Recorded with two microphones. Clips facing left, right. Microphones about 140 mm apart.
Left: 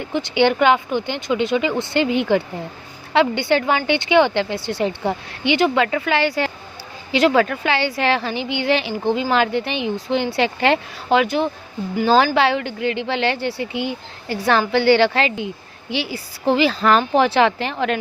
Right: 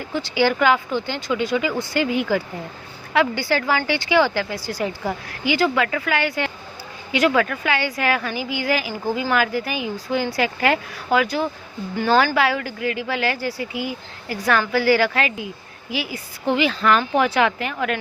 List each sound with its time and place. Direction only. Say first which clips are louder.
0.1 s a woman's voice: left 3 dB; 20° left (ahead or behind)